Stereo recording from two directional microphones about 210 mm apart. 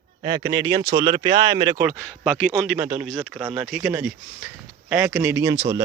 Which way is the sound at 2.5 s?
Centre (ahead or behind).